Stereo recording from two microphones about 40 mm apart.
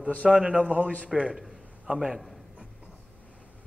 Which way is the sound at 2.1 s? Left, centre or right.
Centre.